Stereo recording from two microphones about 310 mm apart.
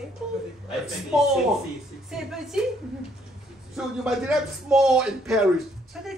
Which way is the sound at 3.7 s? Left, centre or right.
Centre.